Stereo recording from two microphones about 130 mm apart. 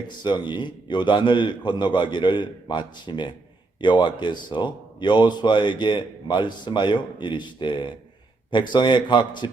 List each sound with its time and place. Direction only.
0.2 s a man's voice: 35° left (ahead or behind)